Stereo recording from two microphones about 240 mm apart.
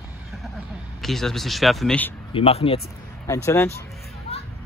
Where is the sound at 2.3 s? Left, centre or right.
Left.